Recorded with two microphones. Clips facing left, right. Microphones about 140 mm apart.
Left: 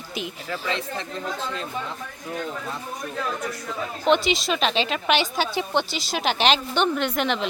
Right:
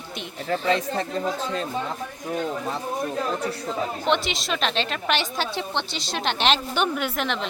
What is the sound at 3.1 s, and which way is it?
Speech, 30° right (ahead or behind).